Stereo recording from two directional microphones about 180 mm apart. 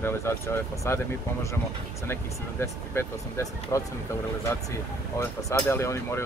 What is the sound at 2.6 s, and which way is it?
Speech, 15° left (ahead or behind).